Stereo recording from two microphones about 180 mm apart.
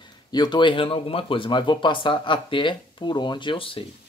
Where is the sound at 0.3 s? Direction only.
25° left (ahead or behind).